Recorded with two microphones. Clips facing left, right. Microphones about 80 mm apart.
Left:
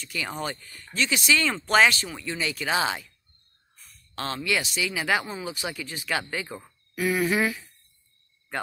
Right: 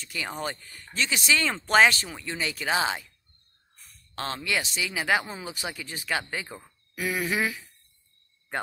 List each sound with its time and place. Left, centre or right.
0.0 s speech: right
4.1 s a sound: right
4.5 s speech: right
6.5 s speech: centre